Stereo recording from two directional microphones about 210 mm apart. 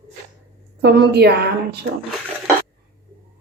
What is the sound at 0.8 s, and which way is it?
Speech, 50° right (ahead or behind).